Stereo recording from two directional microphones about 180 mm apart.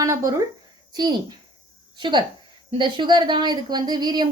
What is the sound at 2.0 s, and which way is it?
A woman's voice, 25° right (ahead or behind).